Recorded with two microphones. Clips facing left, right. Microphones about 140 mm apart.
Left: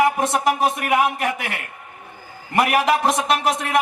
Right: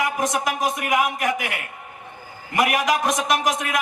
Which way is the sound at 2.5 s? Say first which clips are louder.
Left 3 dB; 30° left (ahead or behind).